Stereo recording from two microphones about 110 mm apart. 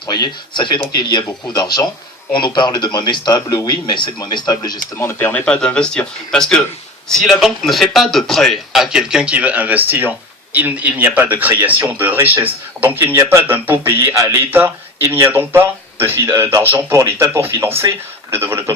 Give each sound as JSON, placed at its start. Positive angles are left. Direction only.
{"t": 0.1, "sound": "a man's voice", "side_deg": 40}
{"t": 4.9, "sound": "speech", "side_deg": 20}
{"t": 5.5, "sound": "speech", "side_deg": 10}
{"t": 14.5, "sound": "speech", "side_deg": -20}